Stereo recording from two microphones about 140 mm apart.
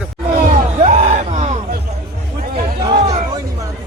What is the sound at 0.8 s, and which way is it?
Speech, 55° right (ahead or behind).